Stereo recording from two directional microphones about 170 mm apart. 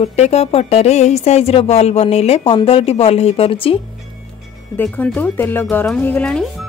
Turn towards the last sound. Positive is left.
turn(degrees=5)  # may be behind; listen again after turning